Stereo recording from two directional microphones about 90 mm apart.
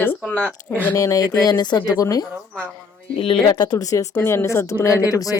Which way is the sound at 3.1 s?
90° left.